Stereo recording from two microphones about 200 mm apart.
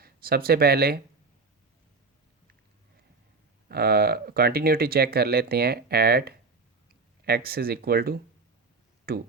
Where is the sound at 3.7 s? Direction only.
50° right (ahead or behind).